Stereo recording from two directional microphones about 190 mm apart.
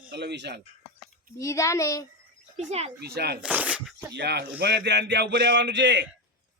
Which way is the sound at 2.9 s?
55° right (ahead or behind).